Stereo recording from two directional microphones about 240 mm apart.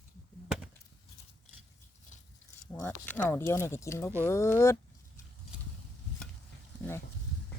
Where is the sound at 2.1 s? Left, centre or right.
Left.